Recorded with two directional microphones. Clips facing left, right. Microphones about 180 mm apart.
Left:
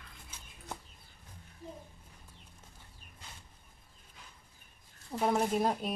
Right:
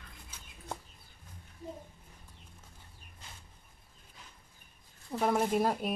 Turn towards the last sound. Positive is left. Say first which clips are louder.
# right 1 dB
turn(degrees=0)  # may be behind; listen again after turning